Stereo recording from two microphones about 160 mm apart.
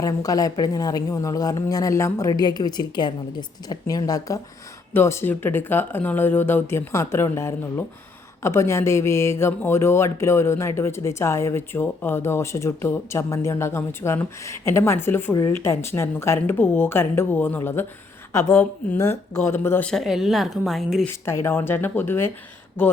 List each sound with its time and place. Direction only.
0.0 s speech: 20° left (ahead or behind)
19.9 s a woman's voice: centre (ahead or behind)
21.1 s speech: 15° left (ahead or behind)